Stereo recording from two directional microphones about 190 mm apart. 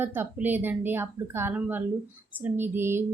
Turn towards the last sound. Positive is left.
turn(degrees=-10)  # may be behind; listen again after turning